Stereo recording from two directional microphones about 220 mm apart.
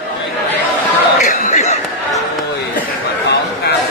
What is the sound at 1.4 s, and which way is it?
Chatter, 30° left (ahead or behind).